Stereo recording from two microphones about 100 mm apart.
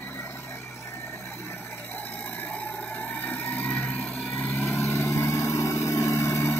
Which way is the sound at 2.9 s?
20° left (ahead or behind).